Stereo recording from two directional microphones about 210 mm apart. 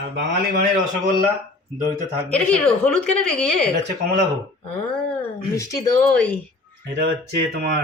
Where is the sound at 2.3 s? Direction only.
5° left (ahead or behind).